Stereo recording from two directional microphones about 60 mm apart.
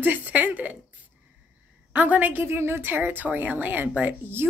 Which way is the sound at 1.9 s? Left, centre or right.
Right.